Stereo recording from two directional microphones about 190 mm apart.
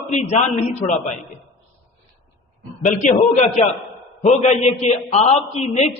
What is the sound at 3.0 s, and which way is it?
A man's voice, 40° left (ahead or behind).